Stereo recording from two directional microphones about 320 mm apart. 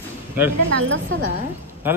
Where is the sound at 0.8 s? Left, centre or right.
Right.